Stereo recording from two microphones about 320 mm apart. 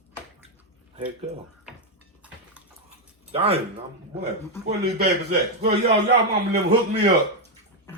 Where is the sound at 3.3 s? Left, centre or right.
Centre.